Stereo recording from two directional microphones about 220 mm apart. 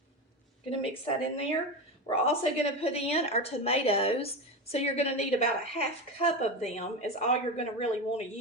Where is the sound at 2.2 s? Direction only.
25° left (ahead or behind).